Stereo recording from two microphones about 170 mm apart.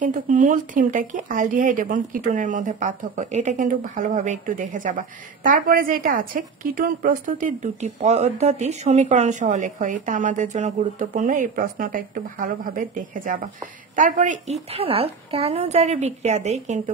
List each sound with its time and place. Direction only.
0.0 s a woman's voice: 50° right (ahead or behind)